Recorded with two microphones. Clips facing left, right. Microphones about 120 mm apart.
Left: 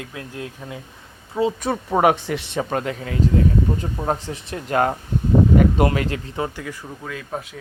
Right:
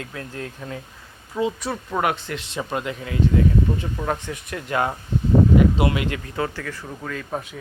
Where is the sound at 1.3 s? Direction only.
25° left (ahead or behind).